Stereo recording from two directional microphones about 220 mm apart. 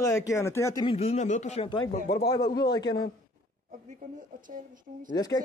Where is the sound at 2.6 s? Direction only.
20° left (ahead or behind).